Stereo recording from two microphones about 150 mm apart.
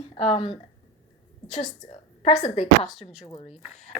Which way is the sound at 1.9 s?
45° left (ahead or behind).